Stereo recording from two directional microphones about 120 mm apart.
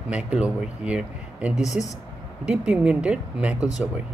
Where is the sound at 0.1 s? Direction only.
10° right (ahead or behind).